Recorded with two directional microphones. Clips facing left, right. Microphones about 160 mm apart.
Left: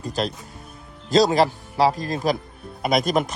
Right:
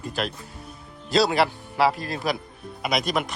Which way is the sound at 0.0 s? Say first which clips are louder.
Left 3 dB; 35° left (ahead or behind).